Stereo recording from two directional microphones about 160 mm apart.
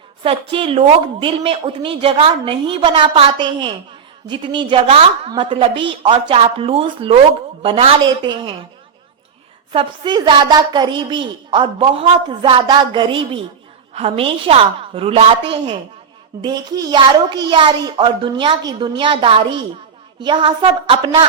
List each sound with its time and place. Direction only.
0.2 s a woman's voice: 35° right (ahead or behind)
9.7 s a woman's voice: 30° right (ahead or behind)
16.4 s a woman's voice: 25° right (ahead or behind)